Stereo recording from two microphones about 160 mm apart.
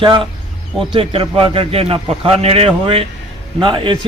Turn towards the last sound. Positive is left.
turn(degrees=-30)  # may be behind; listen again after turning